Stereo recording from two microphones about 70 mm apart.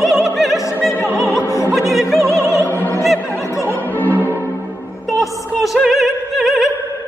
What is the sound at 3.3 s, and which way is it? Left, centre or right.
Music, left.